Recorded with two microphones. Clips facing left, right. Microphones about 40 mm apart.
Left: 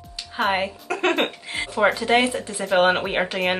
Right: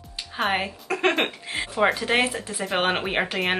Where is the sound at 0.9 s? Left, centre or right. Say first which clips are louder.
Even; centre.